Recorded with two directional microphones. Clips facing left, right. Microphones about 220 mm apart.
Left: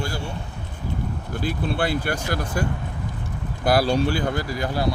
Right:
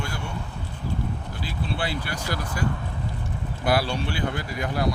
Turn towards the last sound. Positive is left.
turn(degrees=30)  # may be behind; listen again after turning